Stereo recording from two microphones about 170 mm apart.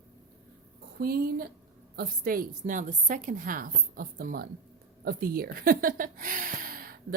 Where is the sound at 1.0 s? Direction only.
60° right (ahead or behind).